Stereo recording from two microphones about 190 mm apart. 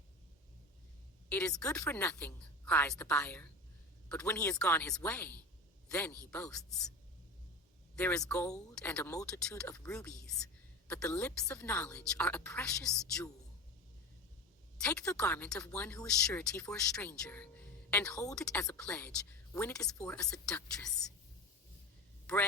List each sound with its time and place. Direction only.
1.3 s a woman's voice: 5° left (ahead or behind)
7.9 s a woman's voice: 5° left (ahead or behind)
14.8 s a woman's voice: 5° left (ahead or behind)